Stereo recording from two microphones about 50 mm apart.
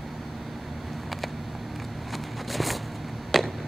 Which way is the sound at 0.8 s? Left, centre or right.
Centre.